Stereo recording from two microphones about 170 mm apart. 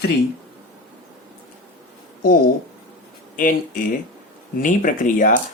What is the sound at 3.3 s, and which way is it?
Speech, 50° left (ahead or behind).